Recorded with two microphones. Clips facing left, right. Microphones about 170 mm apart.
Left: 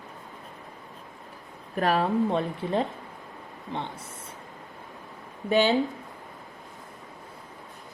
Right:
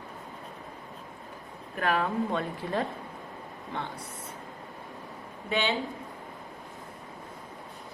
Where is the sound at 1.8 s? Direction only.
30° left (ahead or behind).